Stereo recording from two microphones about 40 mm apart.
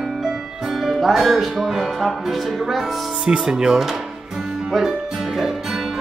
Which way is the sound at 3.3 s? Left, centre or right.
Centre.